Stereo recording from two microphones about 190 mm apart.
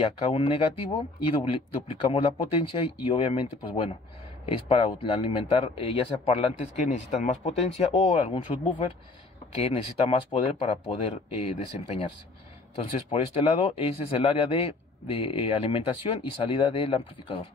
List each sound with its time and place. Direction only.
0.0 s a man's voice: 30° left (ahead or behind)
7.9 s a man's voice: 25° left (ahead or behind)
13.1 s a man's voice: 30° left (ahead or behind)